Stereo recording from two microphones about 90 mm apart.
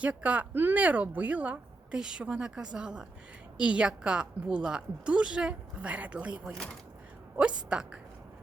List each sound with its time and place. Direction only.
0.0 s a woman's voice: 15° right (ahead or behind)
7.7 s a woman's voice: 10° right (ahead or behind)